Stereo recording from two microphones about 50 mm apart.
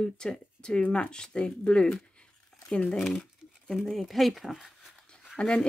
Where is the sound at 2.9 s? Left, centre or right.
Centre.